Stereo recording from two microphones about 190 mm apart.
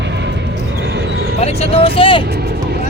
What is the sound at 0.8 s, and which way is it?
Basketball bounce, 65° right (ahead or behind).